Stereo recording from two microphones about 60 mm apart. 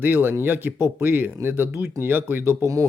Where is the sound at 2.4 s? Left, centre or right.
Right.